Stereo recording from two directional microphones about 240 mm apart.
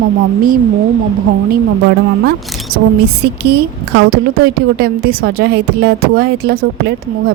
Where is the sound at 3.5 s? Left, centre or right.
Right.